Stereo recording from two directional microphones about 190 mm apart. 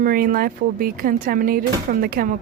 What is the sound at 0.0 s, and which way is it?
Speech, 45° right (ahead or behind).